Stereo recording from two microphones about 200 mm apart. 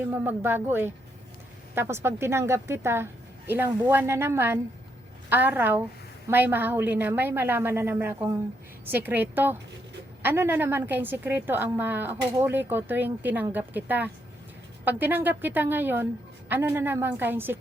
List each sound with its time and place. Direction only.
0.0 s a woman's voice: 10° right (ahead or behind)